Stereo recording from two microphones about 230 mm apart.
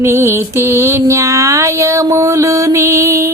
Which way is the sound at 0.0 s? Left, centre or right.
Centre.